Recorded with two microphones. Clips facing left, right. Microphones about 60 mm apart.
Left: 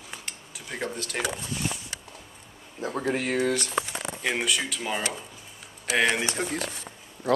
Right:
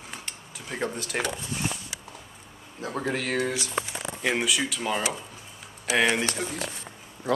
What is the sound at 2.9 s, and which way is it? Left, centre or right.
Music, centre.